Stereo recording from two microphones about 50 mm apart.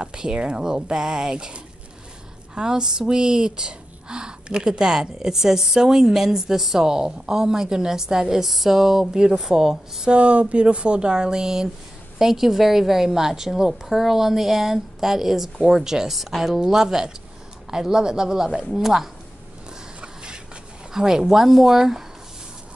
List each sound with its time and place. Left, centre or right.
0.0 s speech: centre
10.1 s a woman's voice: right; by 19.0 s centre
20.9 s speech: centre